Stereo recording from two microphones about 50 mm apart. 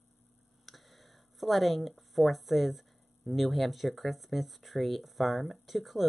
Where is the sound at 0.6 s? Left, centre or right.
Centre.